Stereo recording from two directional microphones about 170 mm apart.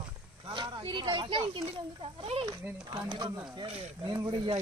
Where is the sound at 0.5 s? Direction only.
30° right (ahead or behind).